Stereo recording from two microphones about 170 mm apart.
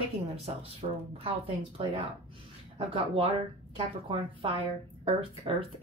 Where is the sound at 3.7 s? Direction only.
30° right (ahead or behind).